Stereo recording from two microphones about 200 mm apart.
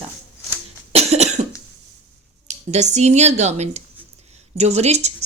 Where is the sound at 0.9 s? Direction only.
30° right (ahead or behind).